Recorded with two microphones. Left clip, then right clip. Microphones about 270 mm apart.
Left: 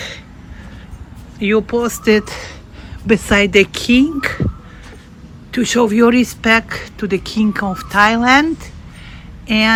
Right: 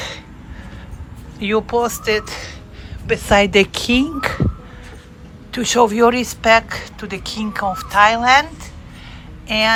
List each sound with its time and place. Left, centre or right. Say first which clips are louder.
1.4 s speech: left 2 dB; centre
5.5 s speech: even; centre